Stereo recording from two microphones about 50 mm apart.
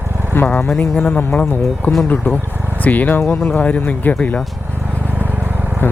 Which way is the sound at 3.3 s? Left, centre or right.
Centre.